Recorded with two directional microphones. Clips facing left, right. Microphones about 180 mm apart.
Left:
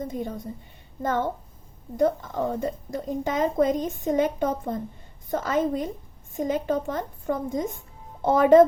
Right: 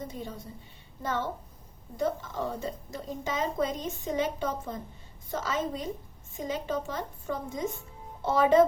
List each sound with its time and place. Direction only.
0.0 s a woman's voice: 50° left (ahead or behind)